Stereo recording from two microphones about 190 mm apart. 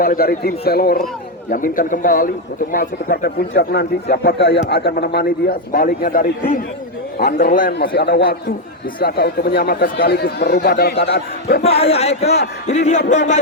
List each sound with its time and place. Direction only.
0.0 s a man's voice: 50° left (ahead or behind)
7.7 s a man's voice: 60° left (ahead or behind)
11.6 s speech: 30° left (ahead or behind)